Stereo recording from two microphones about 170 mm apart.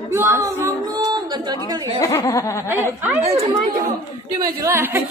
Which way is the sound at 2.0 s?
15° left (ahead or behind).